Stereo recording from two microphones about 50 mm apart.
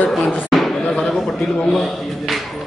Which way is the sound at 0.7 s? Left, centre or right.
Centre.